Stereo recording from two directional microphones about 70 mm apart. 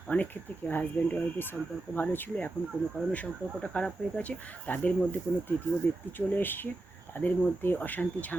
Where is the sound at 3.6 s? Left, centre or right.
Centre.